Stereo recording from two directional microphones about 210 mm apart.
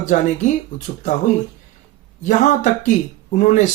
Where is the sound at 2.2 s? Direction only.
35° left (ahead or behind).